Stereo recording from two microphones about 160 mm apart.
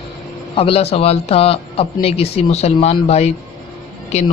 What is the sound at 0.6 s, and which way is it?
A man's voice, 35° left (ahead or behind).